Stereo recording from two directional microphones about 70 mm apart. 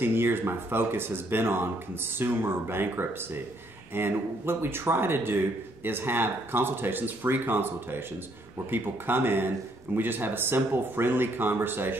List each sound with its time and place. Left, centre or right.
0.0 s speech: right